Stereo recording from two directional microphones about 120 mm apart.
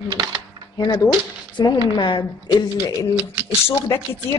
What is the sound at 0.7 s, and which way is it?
A woman's voice, 35° left (ahead or behind).